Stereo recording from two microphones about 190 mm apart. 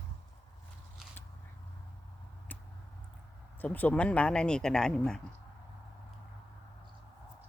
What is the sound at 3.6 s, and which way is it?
Speech, 10° left (ahead or behind).